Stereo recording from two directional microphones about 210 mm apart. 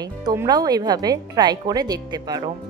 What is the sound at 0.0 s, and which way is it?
Speech, 20° right (ahead or behind).